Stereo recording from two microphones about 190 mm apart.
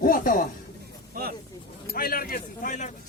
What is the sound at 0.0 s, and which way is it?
Speech, 50° left (ahead or behind).